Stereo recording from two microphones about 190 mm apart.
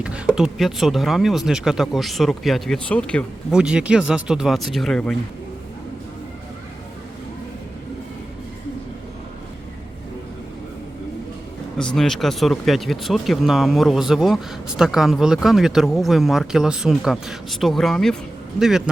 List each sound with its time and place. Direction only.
0.0 s speech: 5° right (ahead or behind)
11.8 s speech: 5° left (ahead or behind)